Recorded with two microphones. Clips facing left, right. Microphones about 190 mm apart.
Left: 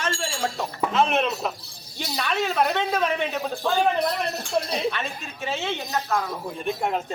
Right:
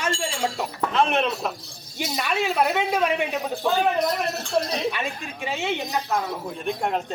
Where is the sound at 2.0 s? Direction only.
10° right (ahead or behind).